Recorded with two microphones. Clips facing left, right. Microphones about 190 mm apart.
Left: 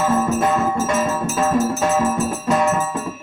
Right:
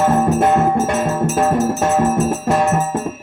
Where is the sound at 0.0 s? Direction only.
55° right (ahead or behind).